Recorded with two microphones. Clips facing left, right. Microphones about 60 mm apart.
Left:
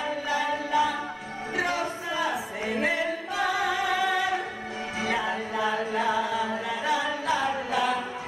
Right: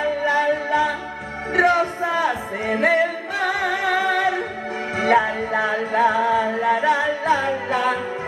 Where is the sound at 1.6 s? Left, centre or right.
Right.